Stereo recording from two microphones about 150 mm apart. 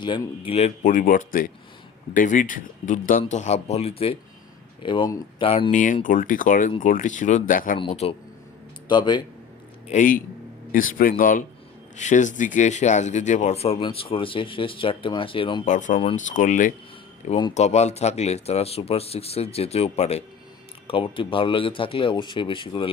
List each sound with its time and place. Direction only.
0.0 s speech: 35° left (ahead or behind)
5.7 s speech: 60° left (ahead or behind)
7.9 s speech: 45° left (ahead or behind)
8.9 s speech: 30° left (ahead or behind)
9.9 s a man's voice: 60° left (ahead or behind); by 15.6 s 35° left (ahead or behind)
15.6 s speech: 55° left (ahead or behind)
17.2 s speech: 40° left (ahead or behind)